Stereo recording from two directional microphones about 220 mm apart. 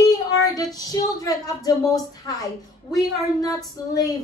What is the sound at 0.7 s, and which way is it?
Speech, 15° left (ahead or behind).